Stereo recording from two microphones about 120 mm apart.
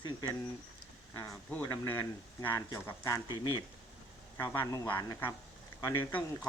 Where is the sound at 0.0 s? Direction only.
35° left (ahead or behind).